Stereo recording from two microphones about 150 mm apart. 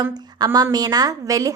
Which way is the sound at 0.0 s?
25° right (ahead or behind).